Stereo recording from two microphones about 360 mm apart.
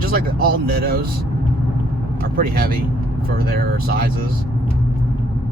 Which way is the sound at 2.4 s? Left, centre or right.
Right.